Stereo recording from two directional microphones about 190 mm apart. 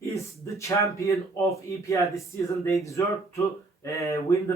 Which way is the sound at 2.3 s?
15° left (ahead or behind).